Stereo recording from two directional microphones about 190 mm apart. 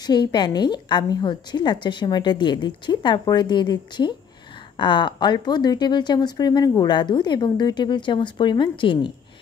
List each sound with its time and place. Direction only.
0.0 s speech: 25° left (ahead or behind)